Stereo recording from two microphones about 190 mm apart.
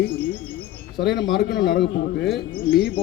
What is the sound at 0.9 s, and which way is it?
Speech, centre (ahead or behind).